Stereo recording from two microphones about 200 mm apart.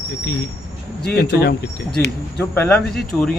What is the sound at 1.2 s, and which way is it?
Speech, 55° left (ahead or behind).